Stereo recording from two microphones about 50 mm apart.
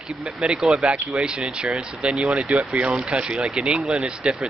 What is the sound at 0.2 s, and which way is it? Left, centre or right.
Speech, centre.